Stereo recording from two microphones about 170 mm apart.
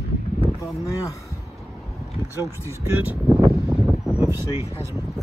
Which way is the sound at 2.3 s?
15° right (ahead or behind).